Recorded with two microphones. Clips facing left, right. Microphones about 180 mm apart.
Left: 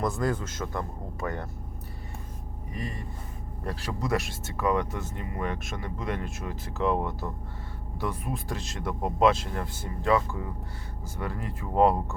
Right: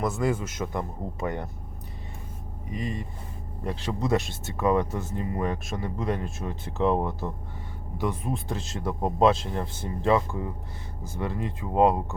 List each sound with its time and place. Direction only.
0.0 s speech: 5° right (ahead or behind)
0.3 s speech: 15° right (ahead or behind)
2.7 s speech: 20° right (ahead or behind)
6.2 s speech: centre (ahead or behind)
6.8 s speech: 35° right (ahead or behind)
7.9 s speech: 20° right (ahead or behind)
9.0 s speech: centre (ahead or behind)
9.2 s speech: 25° right (ahead or behind)